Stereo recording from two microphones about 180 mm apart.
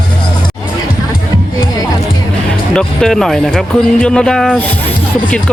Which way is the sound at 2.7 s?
5° left (ahead or behind).